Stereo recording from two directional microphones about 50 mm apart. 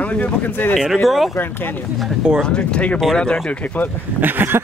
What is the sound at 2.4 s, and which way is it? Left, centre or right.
Speech, centre.